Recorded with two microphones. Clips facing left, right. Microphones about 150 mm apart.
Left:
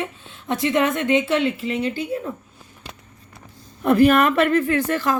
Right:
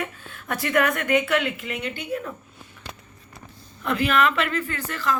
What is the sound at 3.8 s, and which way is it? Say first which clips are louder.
A woman's voice: left 7 dB; 45° left (ahead or behind).